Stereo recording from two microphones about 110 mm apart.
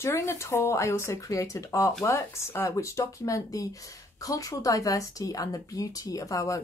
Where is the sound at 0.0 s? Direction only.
25° left (ahead or behind).